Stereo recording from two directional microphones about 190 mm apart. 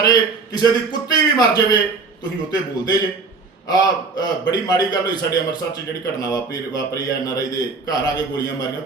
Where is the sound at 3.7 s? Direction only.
20° left (ahead or behind).